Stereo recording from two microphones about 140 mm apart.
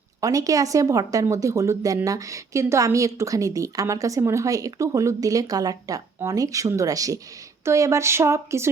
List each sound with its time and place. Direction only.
0.2 s speech: 25° right (ahead or behind)